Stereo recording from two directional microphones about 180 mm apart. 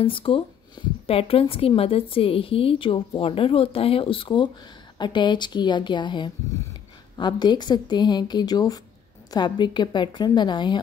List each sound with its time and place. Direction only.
0.0 s speech: 30° left (ahead or behind)